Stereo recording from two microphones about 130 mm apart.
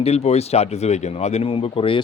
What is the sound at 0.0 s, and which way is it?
A man's voice, 55° left (ahead or behind).